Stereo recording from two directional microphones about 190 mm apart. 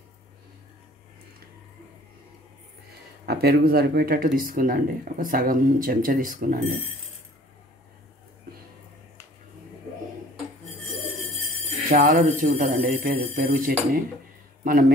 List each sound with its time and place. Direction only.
3.3 s speech: 55° right (ahead or behind)
10.9 s a sound: centre (ahead or behind)
11.9 s speech: 50° right (ahead or behind)